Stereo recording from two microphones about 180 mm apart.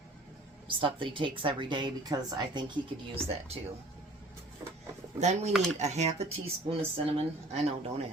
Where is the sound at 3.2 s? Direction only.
35° right (ahead or behind).